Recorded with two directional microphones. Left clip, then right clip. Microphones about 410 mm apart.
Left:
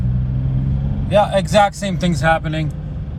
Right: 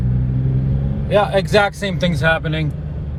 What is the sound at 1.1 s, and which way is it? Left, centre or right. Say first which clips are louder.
Speech: left 1 dB; centre.